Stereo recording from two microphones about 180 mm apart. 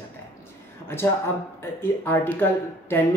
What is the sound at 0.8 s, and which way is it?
Speech, 15° left (ahead or behind).